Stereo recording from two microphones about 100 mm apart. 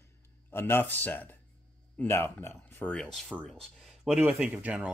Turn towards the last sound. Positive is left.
turn(degrees=-10)  # may be behind; listen again after turning